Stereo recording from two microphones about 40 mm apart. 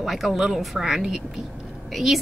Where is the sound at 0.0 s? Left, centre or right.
Centre.